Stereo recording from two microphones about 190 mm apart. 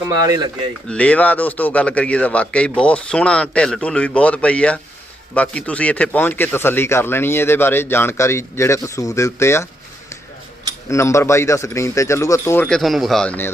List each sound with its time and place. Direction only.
0.1 s speech: 20° right (ahead or behind)
0.9 s speech: 5° left (ahead or behind)
10.8 s speech: 15° left (ahead or behind)